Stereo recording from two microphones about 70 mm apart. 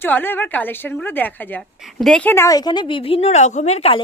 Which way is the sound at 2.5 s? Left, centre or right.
Left.